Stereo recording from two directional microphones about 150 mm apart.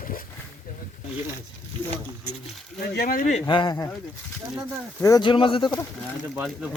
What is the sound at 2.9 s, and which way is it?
Speech, 75° left (ahead or behind).